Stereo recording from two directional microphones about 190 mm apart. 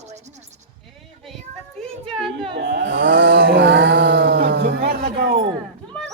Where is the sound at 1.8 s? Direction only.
Centre (ahead or behind).